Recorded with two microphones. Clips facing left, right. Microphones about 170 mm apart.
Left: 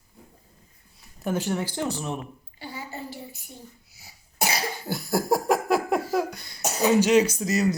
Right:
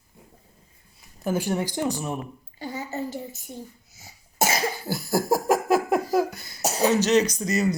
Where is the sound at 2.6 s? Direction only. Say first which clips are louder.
Right 6 dB; 40° right (ahead or behind).